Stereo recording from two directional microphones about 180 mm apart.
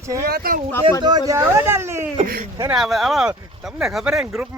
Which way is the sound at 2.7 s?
Centre (ahead or behind).